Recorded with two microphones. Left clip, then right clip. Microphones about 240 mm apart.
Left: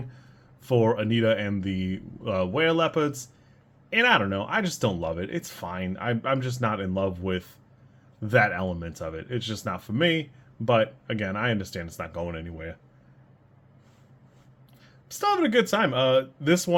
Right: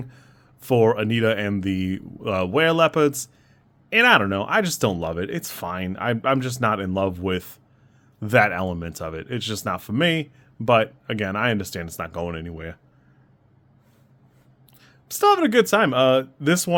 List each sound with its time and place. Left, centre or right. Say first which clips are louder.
0.1 s speech: right 2 dB; right
14.8 s speech: right 9 dB; right